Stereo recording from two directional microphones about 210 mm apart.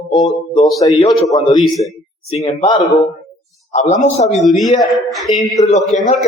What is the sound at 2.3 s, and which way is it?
Speech, 30° left (ahead or behind).